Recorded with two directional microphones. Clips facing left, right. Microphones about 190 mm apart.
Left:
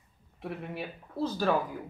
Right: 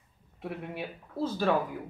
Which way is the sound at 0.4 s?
5° right (ahead or behind).